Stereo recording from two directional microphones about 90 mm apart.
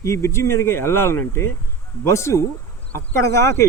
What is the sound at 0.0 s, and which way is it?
Speech, 30° left (ahead or behind).